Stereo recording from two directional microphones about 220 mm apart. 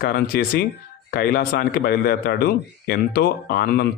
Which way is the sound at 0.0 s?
45° left (ahead or behind).